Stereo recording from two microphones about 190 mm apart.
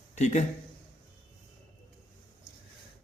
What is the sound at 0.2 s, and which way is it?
Speech, 40° left (ahead or behind).